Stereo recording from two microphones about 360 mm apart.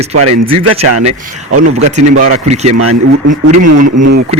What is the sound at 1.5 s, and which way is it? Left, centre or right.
Speech, right.